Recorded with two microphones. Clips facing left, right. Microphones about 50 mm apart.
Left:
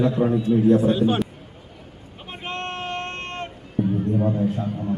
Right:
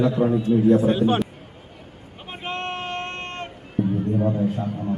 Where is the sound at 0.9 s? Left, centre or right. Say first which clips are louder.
Even; centre.